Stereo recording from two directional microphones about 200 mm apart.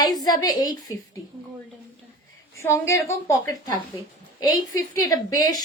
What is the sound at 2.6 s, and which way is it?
Speech, 15° left (ahead or behind).